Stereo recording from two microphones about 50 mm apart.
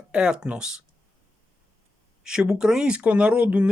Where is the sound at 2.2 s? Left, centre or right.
Centre.